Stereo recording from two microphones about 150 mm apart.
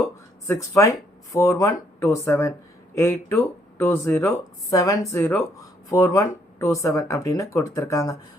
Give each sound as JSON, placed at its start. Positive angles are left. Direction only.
{"t": 0.4, "sound": "speech", "side_deg": 20}